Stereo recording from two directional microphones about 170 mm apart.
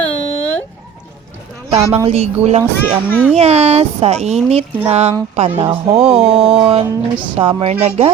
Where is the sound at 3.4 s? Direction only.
40° right (ahead or behind).